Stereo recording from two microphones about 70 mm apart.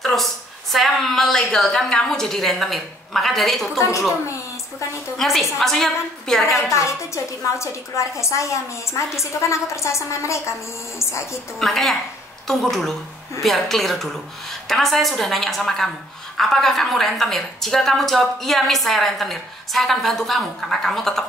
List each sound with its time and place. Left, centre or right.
0.0 s a woman's voice: centre
5.1 s a woman's voice: centre
6.7 s a woman's voice: left
11.6 s a woman's voice: centre